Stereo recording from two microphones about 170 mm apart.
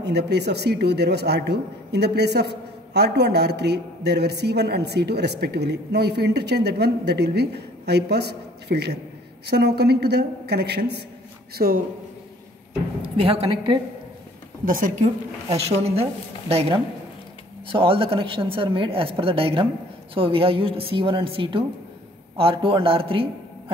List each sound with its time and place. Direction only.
0.0 s a man's voice: 75° right (ahead or behind)
11.5 s speech: 60° right (ahead or behind)
13.0 s a woman's voice: 35° right (ahead or behind)
14.6 s a woman's voice: 55° right (ahead or behind)
15.8 s a woman's voice: 35° right (ahead or behind)